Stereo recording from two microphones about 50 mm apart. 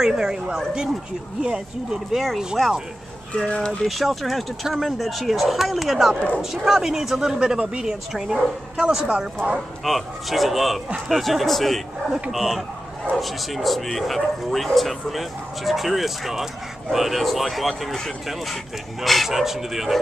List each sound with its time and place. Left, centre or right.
0.0 s speech: centre
2.1 s speech: centre
3.3 s speech: centre
3.8 s speech: centre
6.1 s speech: left
6.5 s speech: centre
8.1 s speech: centre
9.8 s speech: centre